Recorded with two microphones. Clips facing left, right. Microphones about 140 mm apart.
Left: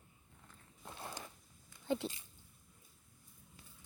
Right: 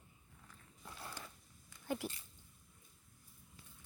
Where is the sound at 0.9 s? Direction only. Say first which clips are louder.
Left 3 dB; 25° left (ahead or behind).